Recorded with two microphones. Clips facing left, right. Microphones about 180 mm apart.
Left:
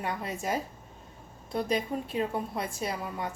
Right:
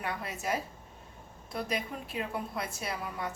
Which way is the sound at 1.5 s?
30° left (ahead or behind).